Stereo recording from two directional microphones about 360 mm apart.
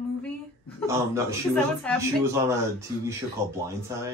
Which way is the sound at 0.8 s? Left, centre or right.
Centre.